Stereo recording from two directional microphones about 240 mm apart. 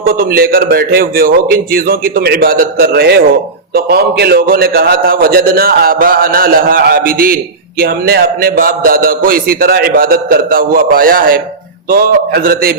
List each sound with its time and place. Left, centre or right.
0.0 s a man's voice: right